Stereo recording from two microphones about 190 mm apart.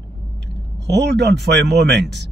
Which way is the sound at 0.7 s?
65° right (ahead or behind).